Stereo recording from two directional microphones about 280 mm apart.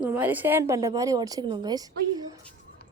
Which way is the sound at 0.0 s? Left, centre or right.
Centre.